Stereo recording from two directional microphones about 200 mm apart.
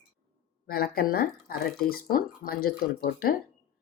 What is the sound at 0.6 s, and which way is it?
Speech, 50° left (ahead or behind).